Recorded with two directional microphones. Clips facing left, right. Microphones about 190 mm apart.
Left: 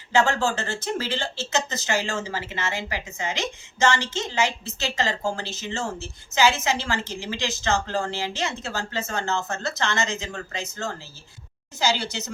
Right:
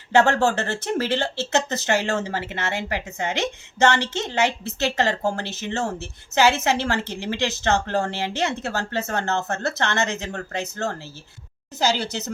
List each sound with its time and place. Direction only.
0.1 s a woman's voice: 60° right (ahead or behind)